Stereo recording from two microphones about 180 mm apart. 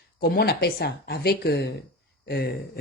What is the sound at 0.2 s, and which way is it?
Speech, 60° left (ahead or behind).